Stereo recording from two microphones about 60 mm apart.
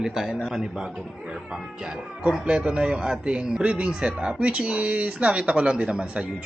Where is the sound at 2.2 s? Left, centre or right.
Centre.